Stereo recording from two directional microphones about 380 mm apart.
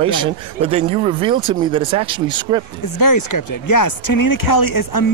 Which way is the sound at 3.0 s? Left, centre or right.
Left.